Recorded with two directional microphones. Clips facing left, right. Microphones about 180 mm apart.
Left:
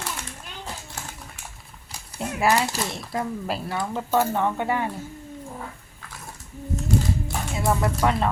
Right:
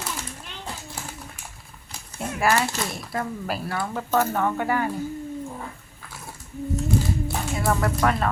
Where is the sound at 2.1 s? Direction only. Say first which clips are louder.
Left 1 dB; 15° left (ahead or behind).